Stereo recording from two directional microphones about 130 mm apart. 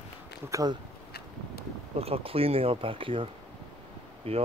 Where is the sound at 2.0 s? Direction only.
45° right (ahead or behind).